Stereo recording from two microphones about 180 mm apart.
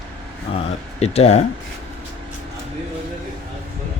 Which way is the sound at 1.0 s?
35° left (ahead or behind).